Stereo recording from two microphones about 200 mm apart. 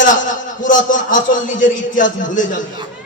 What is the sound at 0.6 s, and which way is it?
A man's voice, 40° left (ahead or behind).